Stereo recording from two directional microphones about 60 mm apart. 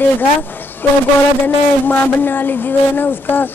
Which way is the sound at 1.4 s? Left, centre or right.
Left.